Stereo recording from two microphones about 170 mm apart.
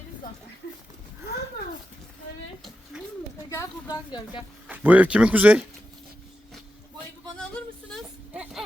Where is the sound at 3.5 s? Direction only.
20° left (ahead or behind).